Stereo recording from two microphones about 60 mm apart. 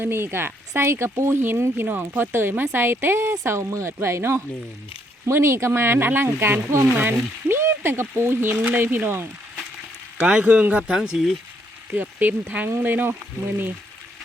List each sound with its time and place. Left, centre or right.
0.0 s speech: right
7.0 s speech: right
10.2 s speech: centre
11.9 s speech: right